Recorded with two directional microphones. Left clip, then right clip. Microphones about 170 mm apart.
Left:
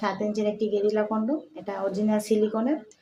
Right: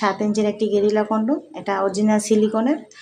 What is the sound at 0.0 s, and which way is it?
Speech, 25° right (ahead or behind).